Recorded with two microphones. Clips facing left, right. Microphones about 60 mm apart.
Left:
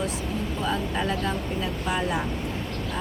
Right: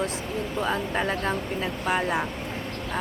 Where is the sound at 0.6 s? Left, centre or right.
Right.